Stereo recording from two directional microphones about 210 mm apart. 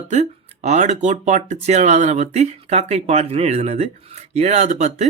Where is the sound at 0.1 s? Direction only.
30° right (ahead or behind).